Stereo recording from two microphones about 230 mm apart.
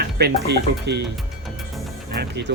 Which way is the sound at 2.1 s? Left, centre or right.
Right.